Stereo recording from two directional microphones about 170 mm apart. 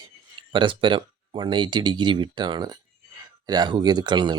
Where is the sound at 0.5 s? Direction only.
30° right (ahead or behind).